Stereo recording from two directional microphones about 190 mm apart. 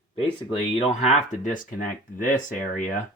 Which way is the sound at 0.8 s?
35° left (ahead or behind).